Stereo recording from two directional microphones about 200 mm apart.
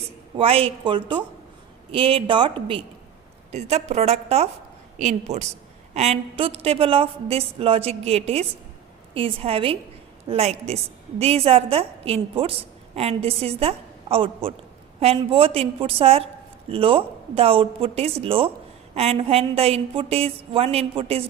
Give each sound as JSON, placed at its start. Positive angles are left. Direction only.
{"t": 0.3, "sound": "a woman's voice", "side_deg": -30}